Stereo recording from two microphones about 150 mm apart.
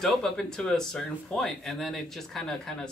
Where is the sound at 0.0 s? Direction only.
5° left (ahead or behind).